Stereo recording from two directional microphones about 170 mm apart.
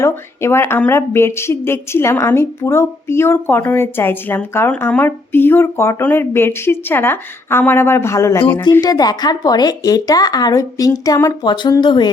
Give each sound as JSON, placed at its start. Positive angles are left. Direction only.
{"t": 0.0, "sound": "a woman's voice", "side_deg": 15}